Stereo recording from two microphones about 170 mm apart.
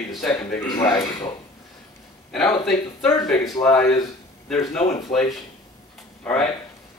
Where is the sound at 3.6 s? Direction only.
5° left (ahead or behind).